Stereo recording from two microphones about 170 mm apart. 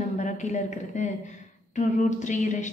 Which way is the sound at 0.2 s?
45° left (ahead or behind).